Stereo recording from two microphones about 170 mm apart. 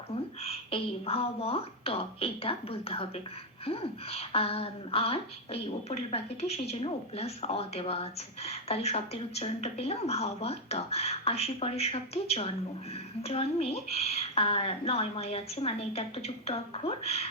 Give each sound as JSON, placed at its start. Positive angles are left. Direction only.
{"t": 0.4, "sound": "speech", "side_deg": 35}